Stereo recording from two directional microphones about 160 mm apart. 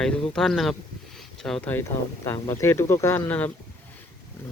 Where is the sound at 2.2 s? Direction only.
20° left (ahead or behind).